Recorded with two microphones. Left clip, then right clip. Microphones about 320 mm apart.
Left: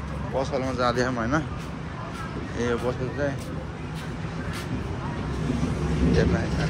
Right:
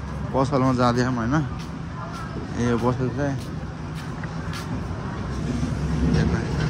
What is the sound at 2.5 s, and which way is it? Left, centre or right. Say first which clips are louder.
Speech: right 3 dB; centre.